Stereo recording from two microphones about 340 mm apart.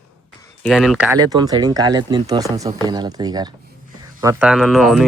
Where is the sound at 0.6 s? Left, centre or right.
Centre.